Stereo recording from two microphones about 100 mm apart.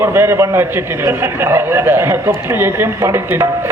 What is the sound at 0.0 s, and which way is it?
A man's voice, 25° right (ahead or behind).